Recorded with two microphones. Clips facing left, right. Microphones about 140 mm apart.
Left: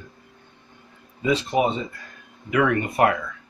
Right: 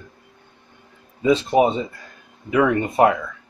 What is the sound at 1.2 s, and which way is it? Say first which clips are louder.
Speech: right 5 dB; 35° right (ahead or behind).